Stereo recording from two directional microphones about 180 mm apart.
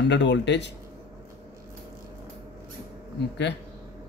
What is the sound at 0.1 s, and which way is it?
Speech, 75° left (ahead or behind).